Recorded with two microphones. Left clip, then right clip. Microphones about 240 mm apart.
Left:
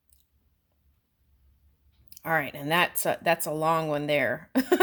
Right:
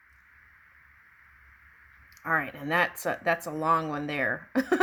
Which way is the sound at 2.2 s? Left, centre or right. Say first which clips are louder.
Left 1 dB; left.